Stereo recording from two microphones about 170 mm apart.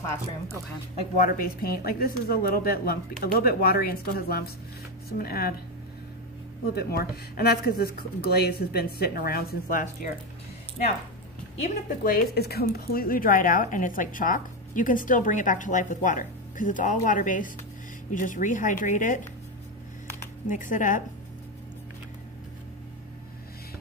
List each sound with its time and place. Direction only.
1.1 s speech: 60° left (ahead or behind)
6.7 s speech: 65° left (ahead or behind)
11.6 s speech: 50° left (ahead or behind)
20.4 s speech: 50° left (ahead or behind)